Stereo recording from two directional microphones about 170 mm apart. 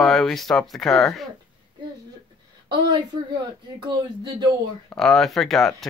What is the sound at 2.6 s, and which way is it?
Speech, 25° right (ahead or behind).